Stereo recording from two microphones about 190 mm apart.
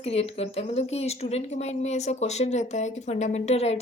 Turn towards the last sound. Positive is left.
turn(degrees=35)  # may be behind; listen again after turning